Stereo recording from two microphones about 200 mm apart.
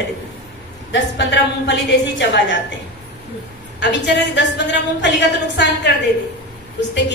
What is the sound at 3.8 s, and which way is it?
A woman's voice, 60° left (ahead or behind).